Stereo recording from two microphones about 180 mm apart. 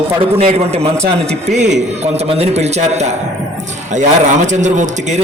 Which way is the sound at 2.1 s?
35° right (ahead or behind).